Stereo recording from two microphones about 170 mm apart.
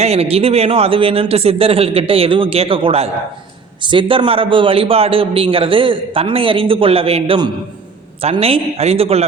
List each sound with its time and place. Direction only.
0.0 s a man's voice: 35° right (ahead or behind)